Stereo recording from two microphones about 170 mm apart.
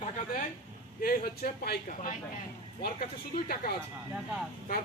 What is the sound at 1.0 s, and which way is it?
Speech, 60° left (ahead or behind).